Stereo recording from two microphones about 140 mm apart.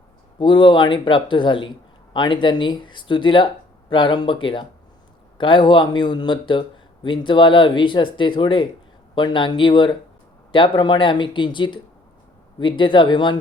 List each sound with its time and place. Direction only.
0.3 s speech: 35° left (ahead or behind)